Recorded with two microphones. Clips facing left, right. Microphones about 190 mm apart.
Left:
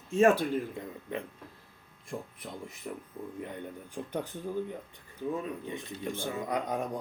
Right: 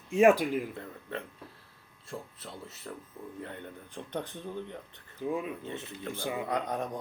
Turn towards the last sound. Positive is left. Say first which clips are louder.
# even
turn(degrees=10)  # may be behind; listen again after turning